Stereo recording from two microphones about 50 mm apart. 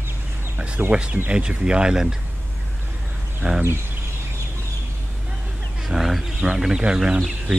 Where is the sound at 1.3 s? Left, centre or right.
Centre.